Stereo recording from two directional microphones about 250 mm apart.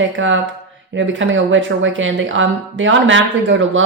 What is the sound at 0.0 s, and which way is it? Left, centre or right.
Speech, right.